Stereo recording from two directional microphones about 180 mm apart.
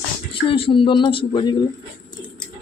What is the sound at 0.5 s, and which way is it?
Speech, 30° left (ahead or behind).